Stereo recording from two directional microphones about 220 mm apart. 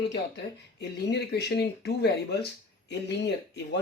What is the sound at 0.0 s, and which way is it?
Speech, 50° left (ahead or behind).